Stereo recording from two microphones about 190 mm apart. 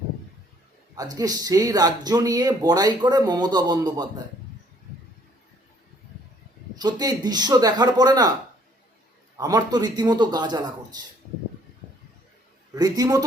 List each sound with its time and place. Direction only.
0.9 s speech: 20° right (ahead or behind)
6.7 s speech: 20° right (ahead or behind)
9.4 s speech: 20° right (ahead or behind)
12.7 s speech: 20° right (ahead or behind)